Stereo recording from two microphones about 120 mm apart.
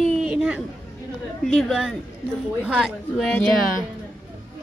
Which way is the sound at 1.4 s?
5° left (ahead or behind).